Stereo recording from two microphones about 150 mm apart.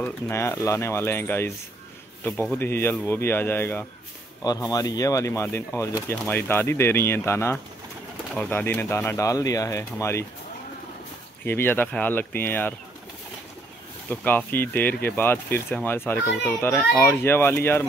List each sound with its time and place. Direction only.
0.0 s speech: 15° left (ahead or behind)
11.4 s speech: 15° left (ahead or behind)
14.0 s speech: 10° left (ahead or behind)